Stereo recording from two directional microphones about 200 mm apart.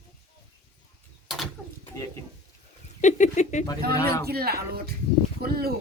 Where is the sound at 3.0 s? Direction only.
35° left (ahead or behind).